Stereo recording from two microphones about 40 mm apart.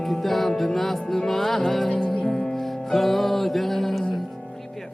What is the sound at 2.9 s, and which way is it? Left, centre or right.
Music, centre.